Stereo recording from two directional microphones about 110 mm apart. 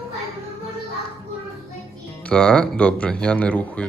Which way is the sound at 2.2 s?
10° left (ahead or behind).